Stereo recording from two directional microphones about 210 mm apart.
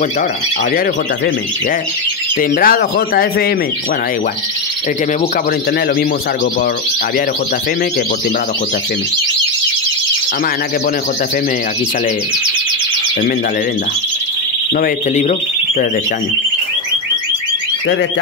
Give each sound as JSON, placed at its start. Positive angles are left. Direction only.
{"t": 2.6, "sound": "speech", "side_deg": 45}
{"t": 14.8, "sound": "speech", "side_deg": 35}